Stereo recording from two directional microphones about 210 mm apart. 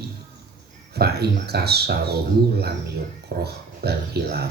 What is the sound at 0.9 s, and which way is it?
Speech, 50° right (ahead or behind).